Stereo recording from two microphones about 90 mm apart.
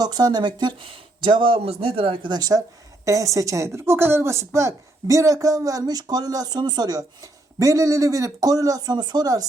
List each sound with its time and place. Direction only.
0.0 s speech: 45° right (ahead or behind); by 2.3 s 90° right
2.3 s a woman's voice: 45° right (ahead or behind)
7.6 s speech: 35° right (ahead or behind)